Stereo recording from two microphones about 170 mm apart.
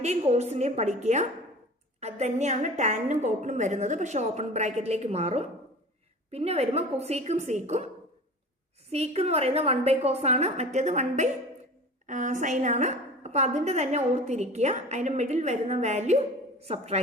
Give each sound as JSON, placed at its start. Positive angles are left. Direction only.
{"t": 0.0, "sound": "a woman's voice", "side_deg": -40}
{"t": 8.9, "sound": "a woman's voice", "side_deg": -40}